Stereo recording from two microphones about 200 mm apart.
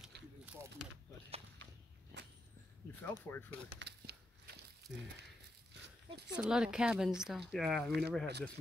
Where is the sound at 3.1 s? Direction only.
10° left (ahead or behind).